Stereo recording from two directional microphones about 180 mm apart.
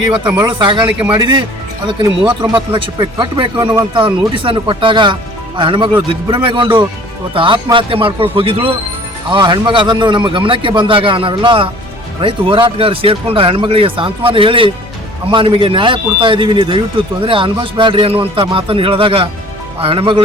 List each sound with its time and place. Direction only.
0.3 s speech: 25° right (ahead or behind)